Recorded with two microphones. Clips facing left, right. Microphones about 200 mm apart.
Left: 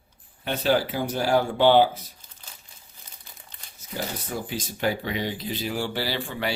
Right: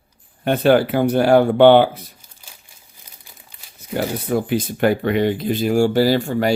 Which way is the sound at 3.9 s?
60° right (ahead or behind).